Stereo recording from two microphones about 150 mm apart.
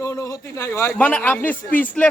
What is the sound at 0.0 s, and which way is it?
Speech, 20° left (ahead or behind).